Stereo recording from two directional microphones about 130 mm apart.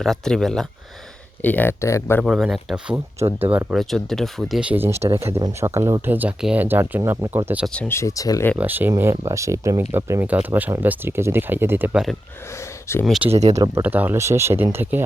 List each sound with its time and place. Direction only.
0.0 s speech: centre (ahead or behind)
1.4 s speech: 15° left (ahead or behind)
2.2 s speech: 5° right (ahead or behind)
3.2 s speech: 20° right (ahead or behind)
3.8 s speech: centre (ahead or behind)
4.7 s speech: 20° right (ahead or behind)
7.7 s speech: 10° left (ahead or behind)
7.9 s speech: 25° left (ahead or behind)
8.5 s speech: 15° right (ahead or behind)
12.5 s a sound: 20° left (ahead or behind)
13.1 s speech: 10° right (ahead or behind)
13.3 s speech: 60° right (ahead or behind)
13.8 s speech: 15° right (ahead or behind)